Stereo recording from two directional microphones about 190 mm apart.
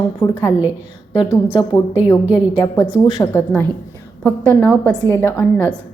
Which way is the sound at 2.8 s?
5° right (ahead or behind).